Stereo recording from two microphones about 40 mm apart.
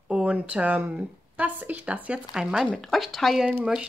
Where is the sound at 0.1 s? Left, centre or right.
Right.